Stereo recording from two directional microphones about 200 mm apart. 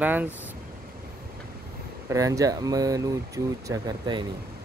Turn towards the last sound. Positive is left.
turn(degrees=-20)  # may be behind; listen again after turning